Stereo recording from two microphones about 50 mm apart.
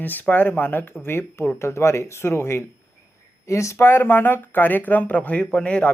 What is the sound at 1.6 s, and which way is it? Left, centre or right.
Speech, left.